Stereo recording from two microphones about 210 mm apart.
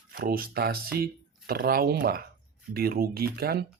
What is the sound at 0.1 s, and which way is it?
Speech, 45° right (ahead or behind).